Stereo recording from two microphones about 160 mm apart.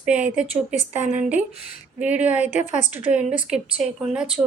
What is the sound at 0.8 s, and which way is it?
Speech, 45° left (ahead or behind).